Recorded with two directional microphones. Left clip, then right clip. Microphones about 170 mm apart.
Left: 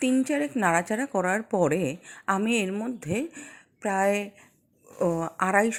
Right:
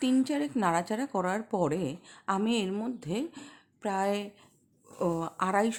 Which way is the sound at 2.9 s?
15° left (ahead or behind).